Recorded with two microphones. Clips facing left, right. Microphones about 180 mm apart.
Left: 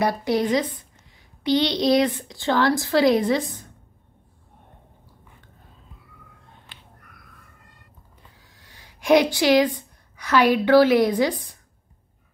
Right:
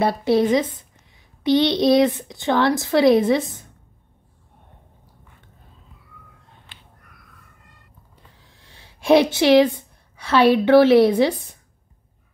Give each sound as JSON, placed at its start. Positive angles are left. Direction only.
{"t": 0.0, "sound": "a child's voice", "side_deg": -25}
{"t": 8.5, "sound": "a sound", "side_deg": -25}
{"t": 9.8, "sound": "a woman's voice", "side_deg": -25}